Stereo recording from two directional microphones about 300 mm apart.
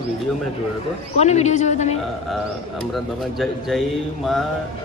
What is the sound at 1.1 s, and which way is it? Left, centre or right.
Speech, left.